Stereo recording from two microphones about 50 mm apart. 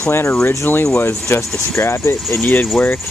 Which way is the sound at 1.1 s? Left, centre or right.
Left.